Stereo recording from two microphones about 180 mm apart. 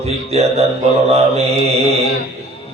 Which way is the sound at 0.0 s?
35° right (ahead or behind).